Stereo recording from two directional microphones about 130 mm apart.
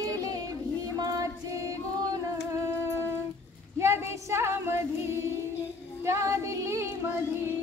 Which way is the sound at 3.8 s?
20° right (ahead or behind).